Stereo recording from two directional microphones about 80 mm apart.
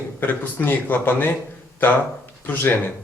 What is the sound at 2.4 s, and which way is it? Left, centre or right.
Speech, left.